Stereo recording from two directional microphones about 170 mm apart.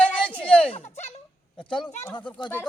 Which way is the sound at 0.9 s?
40° left (ahead or behind).